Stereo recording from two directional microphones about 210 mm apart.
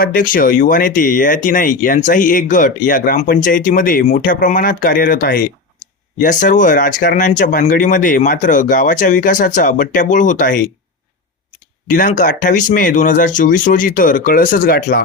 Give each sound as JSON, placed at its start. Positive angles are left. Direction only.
{"t": 0.0, "sound": "speech", "side_deg": 40}
{"t": 11.9, "sound": "speech", "side_deg": 40}